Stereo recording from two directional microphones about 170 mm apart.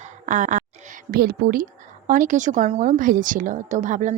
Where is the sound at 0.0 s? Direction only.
45° right (ahead or behind).